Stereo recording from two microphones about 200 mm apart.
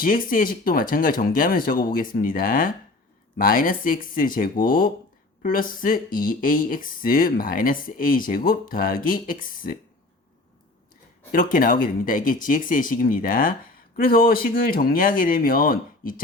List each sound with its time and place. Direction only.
0.0 s speech: 45° left (ahead or behind)
11.3 s speech: 45° left (ahead or behind)